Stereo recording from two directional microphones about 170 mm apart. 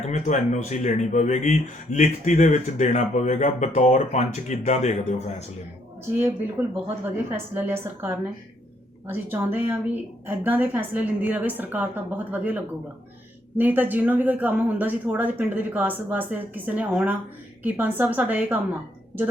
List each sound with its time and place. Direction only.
0.0 s speech: 45° left (ahead or behind)
6.2 s speech: 10° right (ahead or behind)